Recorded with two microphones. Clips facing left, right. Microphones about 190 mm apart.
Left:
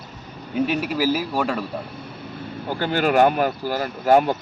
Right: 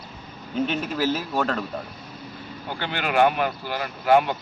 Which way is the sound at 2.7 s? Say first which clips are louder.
Left 5 dB; 40° left (ahead or behind).